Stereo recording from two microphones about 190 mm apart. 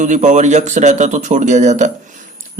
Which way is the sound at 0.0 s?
40° right (ahead or behind).